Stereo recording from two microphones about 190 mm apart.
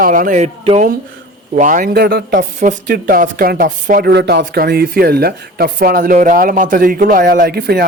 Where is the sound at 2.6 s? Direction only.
45° right (ahead or behind).